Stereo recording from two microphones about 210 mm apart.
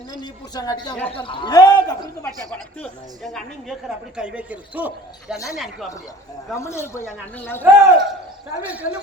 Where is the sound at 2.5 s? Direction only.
5° left (ahead or behind).